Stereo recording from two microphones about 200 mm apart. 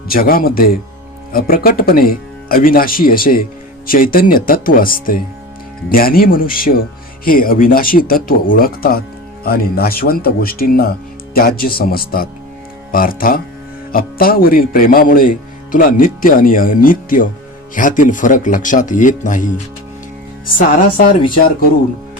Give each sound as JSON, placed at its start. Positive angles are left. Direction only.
{"t": 0.1, "sound": "speech", "side_deg": 45}